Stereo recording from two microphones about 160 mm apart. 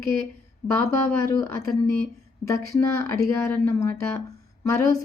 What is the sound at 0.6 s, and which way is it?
Speech, 15° left (ahead or behind).